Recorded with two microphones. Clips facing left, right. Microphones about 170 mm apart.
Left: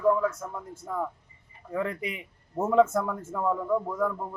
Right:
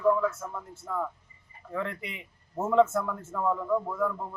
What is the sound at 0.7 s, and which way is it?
A man's voice, 15° left (ahead or behind).